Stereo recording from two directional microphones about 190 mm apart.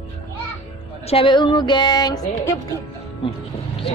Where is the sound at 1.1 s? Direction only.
30° left (ahead or behind).